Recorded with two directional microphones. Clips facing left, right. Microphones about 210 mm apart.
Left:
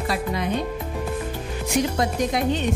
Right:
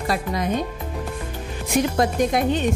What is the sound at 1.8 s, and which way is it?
Speech, 50° right (ahead or behind).